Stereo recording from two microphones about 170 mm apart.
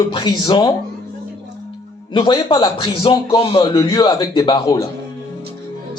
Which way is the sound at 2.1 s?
30° left (ahead or behind).